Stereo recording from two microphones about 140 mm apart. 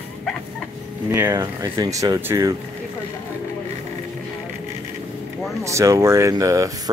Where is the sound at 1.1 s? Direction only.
20° right (ahead or behind).